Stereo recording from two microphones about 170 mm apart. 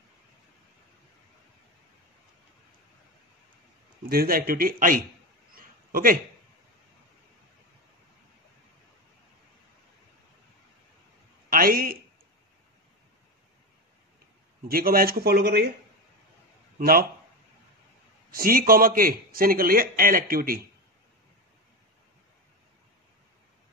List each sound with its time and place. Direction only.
4.0 s a man's voice: 60° right (ahead or behind)
5.5 s a sound: 55° right (ahead or behind)
11.5 s a sound: 60° right (ahead or behind)
14.7 s a man's voice: 60° right (ahead or behind)
16.7 s speech: 60° right (ahead or behind)
18.3 s a man's voice: 55° right (ahead or behind)